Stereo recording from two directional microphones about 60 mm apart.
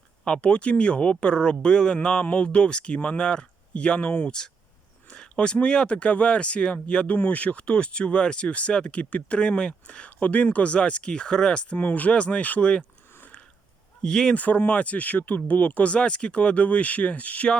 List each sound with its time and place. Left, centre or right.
0.3 s speech: centre
14.0 s speech: centre
14.3 s speech: left